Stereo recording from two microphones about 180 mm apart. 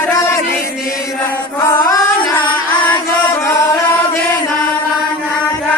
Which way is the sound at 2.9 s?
15° left (ahead or behind).